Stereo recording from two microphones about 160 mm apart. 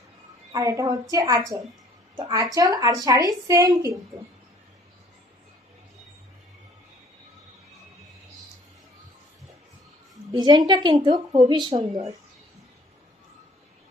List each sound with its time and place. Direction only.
0.5 s a woman's voice: 20° right (ahead or behind)
10.3 s a woman's voice: 25° right (ahead or behind)